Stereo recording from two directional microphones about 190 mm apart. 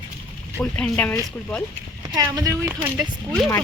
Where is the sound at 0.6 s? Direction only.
5° left (ahead or behind).